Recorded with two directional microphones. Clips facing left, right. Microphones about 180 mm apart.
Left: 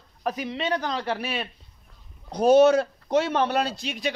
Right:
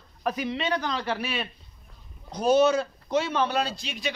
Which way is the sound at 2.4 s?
70° left (ahead or behind).